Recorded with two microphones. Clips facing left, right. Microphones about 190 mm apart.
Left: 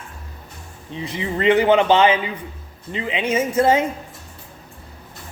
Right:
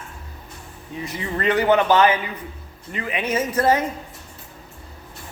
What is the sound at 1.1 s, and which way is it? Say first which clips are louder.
A man's voice: left 5 dB; 15° left (ahead or behind).